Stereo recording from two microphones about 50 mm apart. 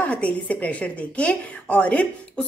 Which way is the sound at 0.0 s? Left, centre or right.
Left.